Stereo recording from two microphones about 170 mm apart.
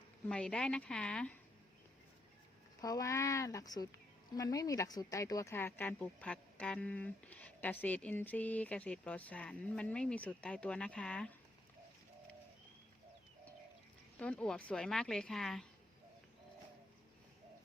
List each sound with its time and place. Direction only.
0.3 s speech: 5° left (ahead or behind)
2.8 s speech: 20° left (ahead or behind)
14.2 s speech: 5° left (ahead or behind)